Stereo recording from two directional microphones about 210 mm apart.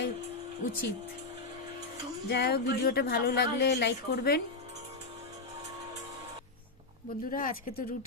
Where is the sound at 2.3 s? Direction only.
50° left (ahead or behind).